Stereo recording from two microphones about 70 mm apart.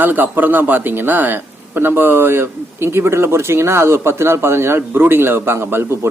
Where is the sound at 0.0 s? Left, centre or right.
Right.